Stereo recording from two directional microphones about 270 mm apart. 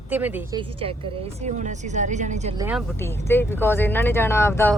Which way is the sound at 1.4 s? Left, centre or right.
Right.